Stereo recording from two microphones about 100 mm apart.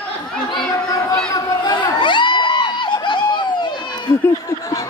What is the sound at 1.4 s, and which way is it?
Speech, 35° left (ahead or behind).